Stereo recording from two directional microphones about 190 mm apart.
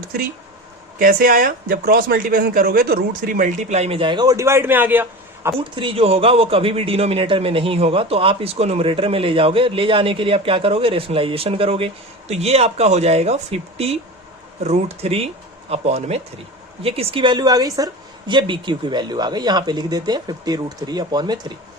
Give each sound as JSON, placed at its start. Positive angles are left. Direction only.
{"t": 0.9, "sound": "speech", "side_deg": -45}
{"t": 5.5, "sound": "a man's voice", "side_deg": -25}